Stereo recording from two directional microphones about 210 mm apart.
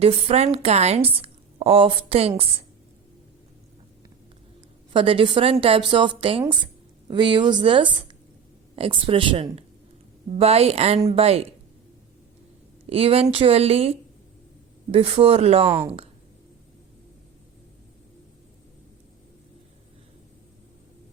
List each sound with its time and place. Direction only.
0.0 s a woman's voice: 30° right (ahead or behind)
4.9 s a woman's voice: 25° right (ahead or behind)
12.9 s a woman's voice: 25° right (ahead or behind)
14.9 s a woman's voice: 25° right (ahead or behind)